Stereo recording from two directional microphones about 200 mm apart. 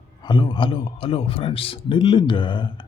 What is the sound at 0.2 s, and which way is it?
A man's voice, 25° left (ahead or behind).